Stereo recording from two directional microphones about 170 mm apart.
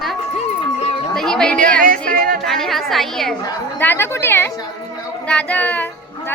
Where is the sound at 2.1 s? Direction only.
55° right (ahead or behind).